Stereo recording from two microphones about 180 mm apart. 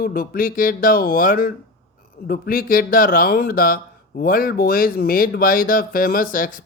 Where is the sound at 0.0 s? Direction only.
55° left (ahead or behind).